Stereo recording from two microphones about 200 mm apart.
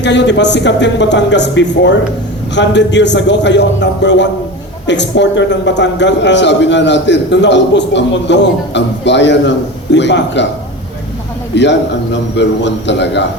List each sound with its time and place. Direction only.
0.0 s a man's voice: 60° left (ahead or behind)
11.5 s a man's voice: 60° left (ahead or behind)